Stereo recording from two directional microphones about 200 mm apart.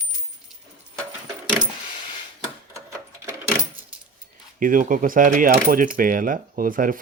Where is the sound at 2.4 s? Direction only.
15° right (ahead or behind).